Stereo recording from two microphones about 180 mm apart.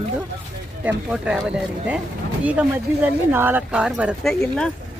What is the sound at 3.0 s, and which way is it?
Speech, 10° right (ahead or behind).